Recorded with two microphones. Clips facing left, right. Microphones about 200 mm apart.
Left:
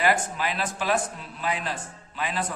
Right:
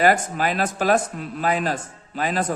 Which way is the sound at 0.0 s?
45° right (ahead or behind).